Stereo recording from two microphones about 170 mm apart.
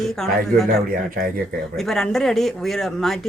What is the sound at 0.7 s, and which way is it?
Speech, 60° right (ahead or behind).